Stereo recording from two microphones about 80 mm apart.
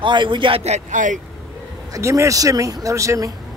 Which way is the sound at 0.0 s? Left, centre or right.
Right.